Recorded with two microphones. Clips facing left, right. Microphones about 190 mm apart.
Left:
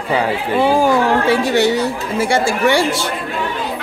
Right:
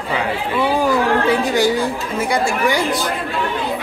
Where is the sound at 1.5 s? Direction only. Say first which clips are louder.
Left 2 dB; 70° left (ahead or behind).